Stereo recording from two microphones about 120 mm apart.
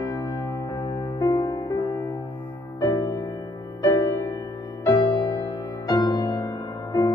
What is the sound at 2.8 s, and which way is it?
Music, 30° left (ahead or behind).